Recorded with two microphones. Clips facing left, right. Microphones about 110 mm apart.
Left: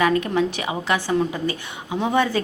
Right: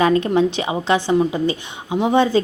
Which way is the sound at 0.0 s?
30° right (ahead or behind).